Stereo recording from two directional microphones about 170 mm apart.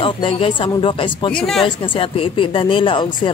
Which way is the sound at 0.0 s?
30° left (ahead or behind).